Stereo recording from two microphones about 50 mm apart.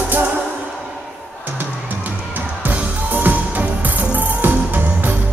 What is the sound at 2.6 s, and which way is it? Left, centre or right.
Music, right.